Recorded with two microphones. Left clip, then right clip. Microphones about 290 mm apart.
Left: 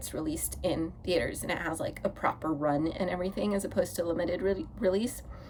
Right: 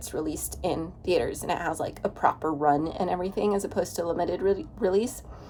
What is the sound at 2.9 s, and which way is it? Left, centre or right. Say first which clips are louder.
Speech: right 4 dB; centre.